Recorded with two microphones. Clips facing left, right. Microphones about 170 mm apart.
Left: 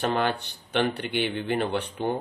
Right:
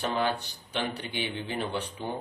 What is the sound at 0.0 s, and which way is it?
A man's voice, 60° left (ahead or behind).